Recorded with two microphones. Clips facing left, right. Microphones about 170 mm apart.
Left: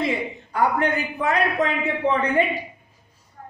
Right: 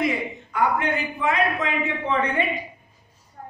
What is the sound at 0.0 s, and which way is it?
A man's voice, 35° left (ahead or behind).